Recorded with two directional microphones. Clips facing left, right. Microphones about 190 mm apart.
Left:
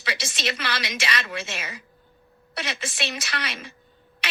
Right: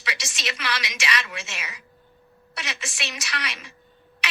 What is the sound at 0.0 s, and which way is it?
A woman's voice, 30° left (ahead or behind).